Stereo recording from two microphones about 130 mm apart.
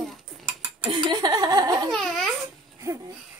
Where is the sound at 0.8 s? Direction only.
35° right (ahead or behind).